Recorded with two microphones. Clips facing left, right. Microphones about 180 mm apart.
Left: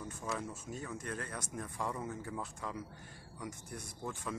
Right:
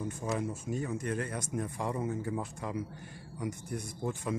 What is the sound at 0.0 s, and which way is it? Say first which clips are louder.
Speech: right 7 dB; 20° right (ahead or behind).